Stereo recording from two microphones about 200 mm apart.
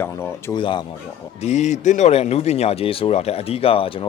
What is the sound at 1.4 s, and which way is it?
Speech, 35° left (ahead or behind).